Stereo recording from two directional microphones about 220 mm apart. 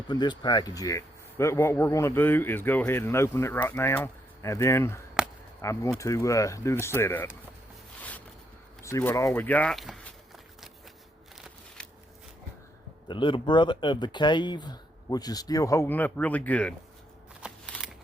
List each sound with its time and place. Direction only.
0.1 s speech: 20° left (ahead or behind)
5.2 s chop: 5° right (ahead or behind)
5.6 s speech: 15° left (ahead or behind)
8.8 s walk: 15° left (ahead or behind)
13.1 s speech: 20° left (ahead or behind); by 16.7 s 5° left (ahead or behind)
17.4 s a sound: centre (ahead or behind)